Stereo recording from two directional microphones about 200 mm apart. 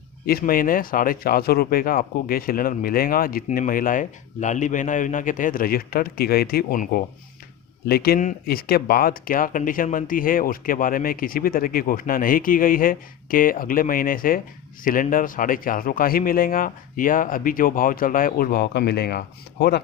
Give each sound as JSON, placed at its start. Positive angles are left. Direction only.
{"t": 0.3, "sound": "speech", "side_deg": 45}